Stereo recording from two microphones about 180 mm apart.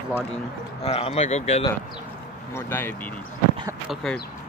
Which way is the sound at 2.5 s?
15° left (ahead or behind).